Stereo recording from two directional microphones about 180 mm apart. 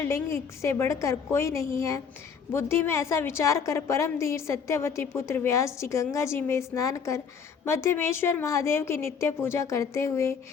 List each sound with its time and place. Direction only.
0.0 s a woman's voice: 15° left (ahead or behind)